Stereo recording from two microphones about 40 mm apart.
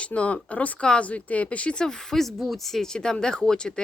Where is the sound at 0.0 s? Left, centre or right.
Left.